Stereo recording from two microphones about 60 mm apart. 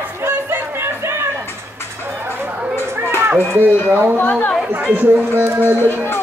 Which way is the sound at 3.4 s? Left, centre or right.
Right.